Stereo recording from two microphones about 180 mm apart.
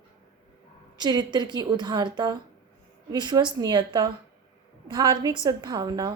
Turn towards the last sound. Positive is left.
turn(degrees=-20)  # may be behind; listen again after turning